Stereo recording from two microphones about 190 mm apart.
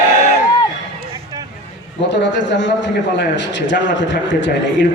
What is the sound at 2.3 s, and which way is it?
A man's voice, 70° left (ahead or behind).